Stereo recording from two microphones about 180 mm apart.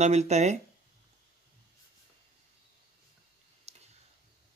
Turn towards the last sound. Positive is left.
turn(degrees=-35)  # may be behind; listen again after turning